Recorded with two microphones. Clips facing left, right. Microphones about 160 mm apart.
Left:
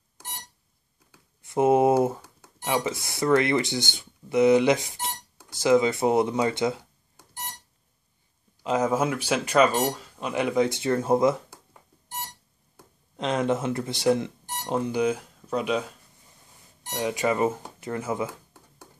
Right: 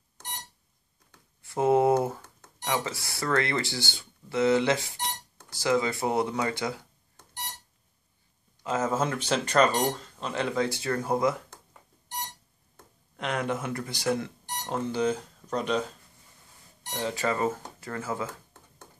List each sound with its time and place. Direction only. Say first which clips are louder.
0.2 s a sound: right 1 dB; 10° left (ahead or behind)
1.4 s speech: left 3 dB; 20° left (ahead or behind)
8.6 s speech: left 4 dB; 15° left (ahead or behind)
12.8 s a sound: left 2 dB; 10° left (ahead or behind)
13.1 s speech: left 5 dB; 20° left (ahead or behind)
16.9 s speech: left 4 dB; 15° left (ahead or behind)